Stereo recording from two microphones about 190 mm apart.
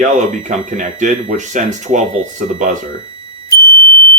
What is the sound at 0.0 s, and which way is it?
Speech, 40° right (ahead or behind).